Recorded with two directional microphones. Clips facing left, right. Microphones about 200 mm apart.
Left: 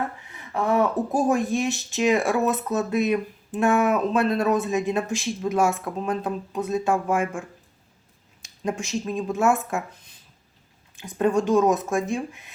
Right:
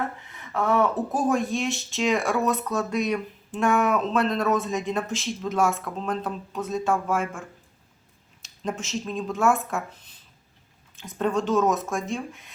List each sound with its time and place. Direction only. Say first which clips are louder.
0.3 s speech: left 1 dB; 15° left (ahead or behind)
8.6 s speech: left 3 dB; 15° left (ahead or behind)
11.2 s speech: left 3 dB; 15° left (ahead or behind)